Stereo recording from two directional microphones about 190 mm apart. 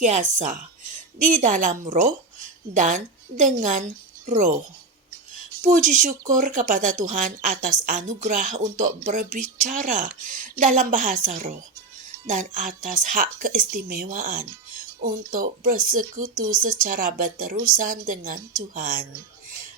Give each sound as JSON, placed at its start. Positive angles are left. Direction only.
{"t": 0.0, "sound": "a woman's voice", "side_deg": -40}
{"t": 5.6, "sound": "speech", "side_deg": -40}